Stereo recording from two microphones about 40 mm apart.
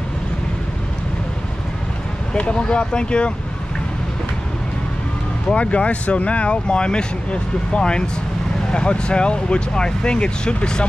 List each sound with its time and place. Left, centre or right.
2.3 s speech: left
5.6 s speech: left